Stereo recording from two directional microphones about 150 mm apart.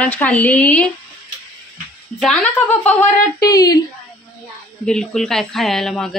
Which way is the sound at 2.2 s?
5° left (ahead or behind).